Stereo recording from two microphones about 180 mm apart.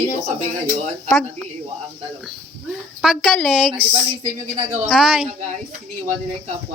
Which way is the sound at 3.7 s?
30° right (ahead or behind).